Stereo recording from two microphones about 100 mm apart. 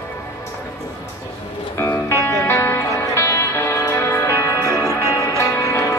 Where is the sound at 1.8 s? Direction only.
25° left (ahead or behind).